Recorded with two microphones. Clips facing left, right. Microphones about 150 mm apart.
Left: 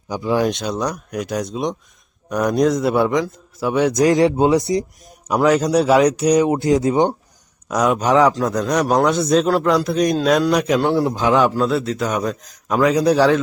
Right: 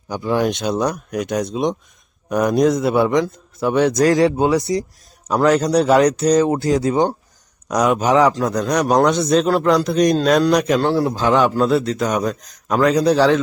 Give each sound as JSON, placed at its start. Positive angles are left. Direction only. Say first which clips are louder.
{"t": 0.1, "sound": "a man's voice", "louder": "even", "side_deg": 0}
{"t": 3.9, "sound": "speech", "louder": "even", "side_deg": 20}
{"t": 5.4, "sound": "speech", "louder": "even", "side_deg": 0}
{"t": 7.7, "sound": "a man's voice", "louder": "right 1 dB", "side_deg": 0}
{"t": 10.9, "sound": "speech", "louder": "even", "side_deg": 20}
{"t": 11.3, "sound": "a man's voice", "louder": "right 2 dB", "side_deg": 0}